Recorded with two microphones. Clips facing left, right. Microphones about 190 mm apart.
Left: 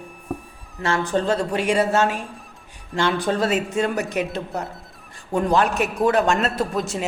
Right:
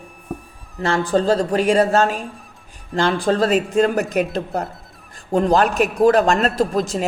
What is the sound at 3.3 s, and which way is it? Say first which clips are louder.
Speech: right 6 dB; 35° right (ahead or behind).